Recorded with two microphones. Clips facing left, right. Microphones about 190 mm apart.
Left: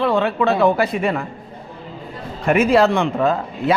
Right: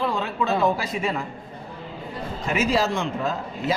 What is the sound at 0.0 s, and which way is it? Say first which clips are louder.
Speech: left 8 dB; 65° left (ahead or behind).